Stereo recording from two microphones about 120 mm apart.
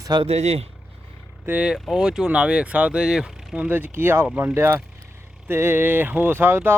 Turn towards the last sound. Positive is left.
turn(degrees=-15)  # may be behind; listen again after turning